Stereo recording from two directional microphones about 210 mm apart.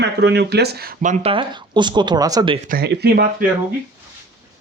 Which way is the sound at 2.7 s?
45° right (ahead or behind).